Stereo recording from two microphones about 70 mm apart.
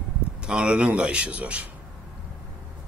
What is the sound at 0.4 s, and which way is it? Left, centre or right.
A man's voice, centre.